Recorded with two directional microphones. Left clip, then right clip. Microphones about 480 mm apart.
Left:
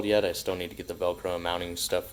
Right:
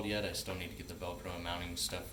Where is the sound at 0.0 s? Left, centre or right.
Centre.